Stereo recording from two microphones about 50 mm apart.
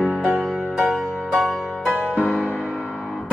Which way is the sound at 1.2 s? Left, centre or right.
Centre.